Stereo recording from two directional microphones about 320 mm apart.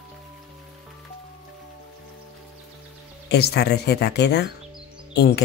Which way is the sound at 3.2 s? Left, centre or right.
Left.